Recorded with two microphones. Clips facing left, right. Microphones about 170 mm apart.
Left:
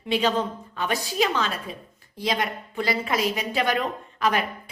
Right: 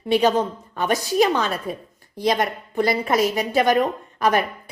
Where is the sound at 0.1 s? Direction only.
45° right (ahead or behind).